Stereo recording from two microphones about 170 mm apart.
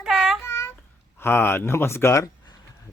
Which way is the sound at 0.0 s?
5° right (ahead or behind).